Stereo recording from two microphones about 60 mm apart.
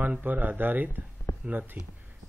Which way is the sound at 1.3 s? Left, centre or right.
Left.